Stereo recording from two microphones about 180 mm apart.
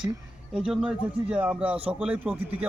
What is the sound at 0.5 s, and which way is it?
A man's voice, centre (ahead or behind).